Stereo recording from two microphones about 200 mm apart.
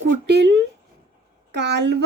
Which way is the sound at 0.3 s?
55° right (ahead or behind).